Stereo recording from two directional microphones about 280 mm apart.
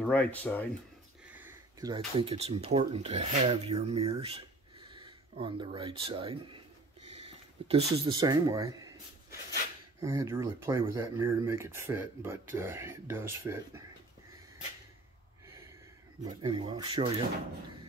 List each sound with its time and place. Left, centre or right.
0.0 s speech: centre
1.2 s a sound: centre
2.1 s speech: right
5.4 s speech: centre
9.9 s speech: centre
16.4 s speech: centre